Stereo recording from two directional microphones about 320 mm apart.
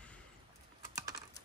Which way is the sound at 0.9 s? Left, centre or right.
Centre.